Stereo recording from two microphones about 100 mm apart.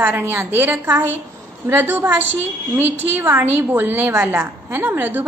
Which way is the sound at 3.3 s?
20° right (ahead or behind).